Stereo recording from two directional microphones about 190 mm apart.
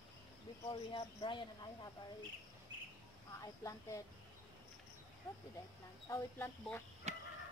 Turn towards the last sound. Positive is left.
turn(degrees=-35)  # may be behind; listen again after turning